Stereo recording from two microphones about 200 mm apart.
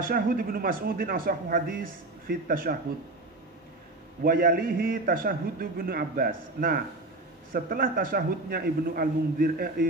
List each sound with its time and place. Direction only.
0.0 s speech: 45° right (ahead or behind)
4.2 s speech: 45° right (ahead or behind)